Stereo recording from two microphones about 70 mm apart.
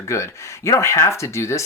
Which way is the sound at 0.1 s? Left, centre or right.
Left.